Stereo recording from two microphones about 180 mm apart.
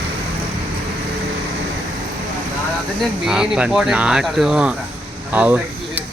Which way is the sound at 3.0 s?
5° right (ahead or behind).